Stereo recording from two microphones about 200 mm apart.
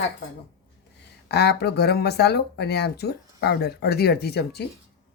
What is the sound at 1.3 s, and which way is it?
Speech, 55° left (ahead or behind).